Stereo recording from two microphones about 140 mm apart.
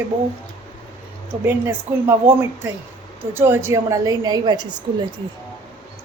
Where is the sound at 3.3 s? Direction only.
15° right (ahead or behind).